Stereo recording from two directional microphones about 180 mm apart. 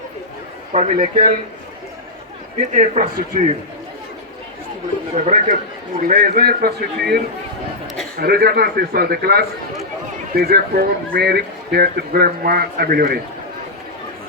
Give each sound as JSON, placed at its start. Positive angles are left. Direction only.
{"t": 0.7, "sound": "a man's voice", "side_deg": -45}
{"t": 2.6, "sound": "a man's voice", "side_deg": -45}
{"t": 5.1, "sound": "a man's voice", "side_deg": -45}